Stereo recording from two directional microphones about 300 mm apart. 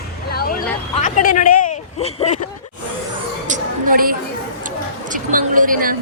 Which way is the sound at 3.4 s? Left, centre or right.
Right.